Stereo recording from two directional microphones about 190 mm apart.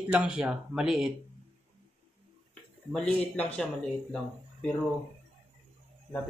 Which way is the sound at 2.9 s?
5° left (ahead or behind).